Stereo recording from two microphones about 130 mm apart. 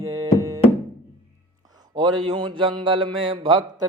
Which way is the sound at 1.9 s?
35° right (ahead or behind).